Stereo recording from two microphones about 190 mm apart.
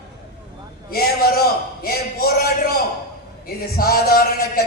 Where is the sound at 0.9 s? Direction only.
55° left (ahead or behind).